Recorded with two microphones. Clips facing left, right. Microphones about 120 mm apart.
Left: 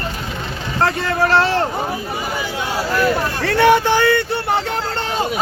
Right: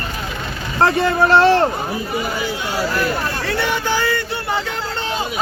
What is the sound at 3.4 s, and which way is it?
Speech, 60° left (ahead or behind).